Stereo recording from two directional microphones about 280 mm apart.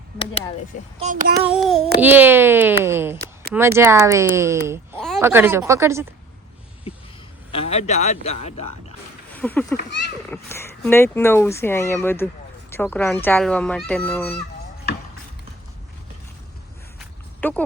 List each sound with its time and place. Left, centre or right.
0.9 s a sound: right
1.5 s speech: centre
4.9 s speech: centre
7.5 s a man's voice: left
9.3 s speech: centre
17.0 s a sound: centre